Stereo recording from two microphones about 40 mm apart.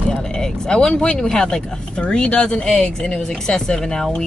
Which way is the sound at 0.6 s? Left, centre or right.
Centre.